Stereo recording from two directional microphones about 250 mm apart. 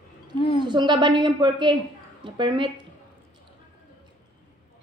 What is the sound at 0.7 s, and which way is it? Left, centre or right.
A woman's voice, centre.